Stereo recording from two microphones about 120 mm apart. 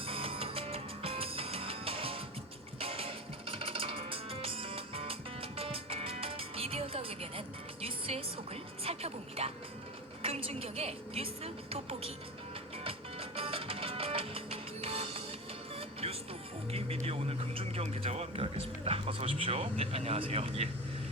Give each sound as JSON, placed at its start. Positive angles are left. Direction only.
{"t": 0.0, "sound": "music", "side_deg": -50}
{"t": 8.8, "sound": "a woman's voice", "side_deg": -55}
{"t": 12.8, "sound": "music", "side_deg": -50}
{"t": 16.7, "sound": "a sound", "side_deg": -55}